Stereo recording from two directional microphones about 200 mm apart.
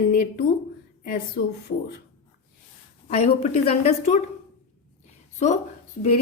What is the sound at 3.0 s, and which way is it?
A woman's voice, 30° left (ahead or behind).